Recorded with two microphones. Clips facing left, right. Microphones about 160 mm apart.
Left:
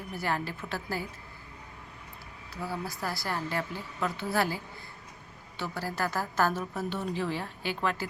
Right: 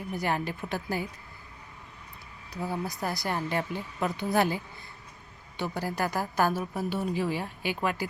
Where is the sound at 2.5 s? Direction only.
20° right (ahead or behind).